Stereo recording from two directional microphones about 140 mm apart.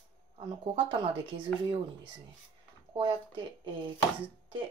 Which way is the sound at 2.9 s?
35° right (ahead or behind).